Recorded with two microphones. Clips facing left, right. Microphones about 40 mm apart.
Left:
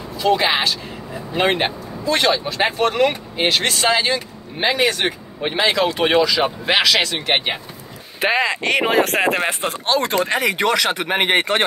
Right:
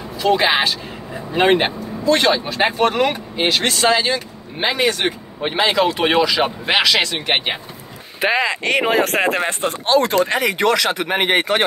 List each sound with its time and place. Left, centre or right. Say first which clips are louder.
0.2 s speech: right 1 dB; centre
9.4 s speech: right 1 dB; centre
9.7 s speech: right 6 dB; centre